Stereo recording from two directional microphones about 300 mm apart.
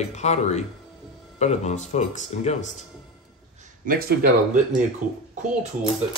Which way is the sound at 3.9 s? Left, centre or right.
Right.